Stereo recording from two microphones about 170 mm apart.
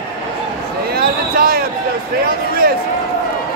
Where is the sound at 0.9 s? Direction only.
65° right (ahead or behind).